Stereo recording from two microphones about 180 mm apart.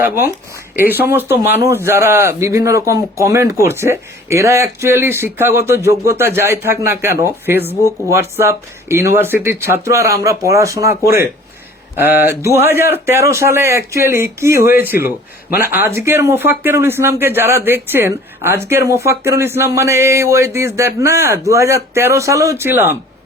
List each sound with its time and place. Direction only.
0.0 s speech: 15° right (ahead or behind)